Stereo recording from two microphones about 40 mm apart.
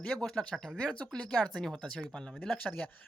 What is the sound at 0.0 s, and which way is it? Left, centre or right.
Speech, left.